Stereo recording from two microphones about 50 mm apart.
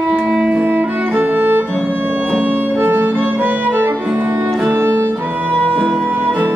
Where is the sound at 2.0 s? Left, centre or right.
Right.